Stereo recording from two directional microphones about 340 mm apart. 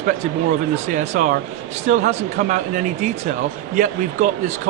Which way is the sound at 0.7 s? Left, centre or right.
Centre.